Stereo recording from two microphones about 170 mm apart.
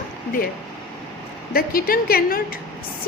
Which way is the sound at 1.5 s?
60° left (ahead or behind).